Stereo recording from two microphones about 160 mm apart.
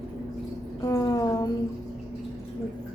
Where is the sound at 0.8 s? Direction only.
20° left (ahead or behind).